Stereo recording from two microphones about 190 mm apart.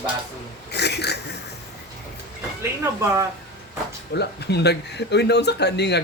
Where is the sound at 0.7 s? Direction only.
60° left (ahead or behind).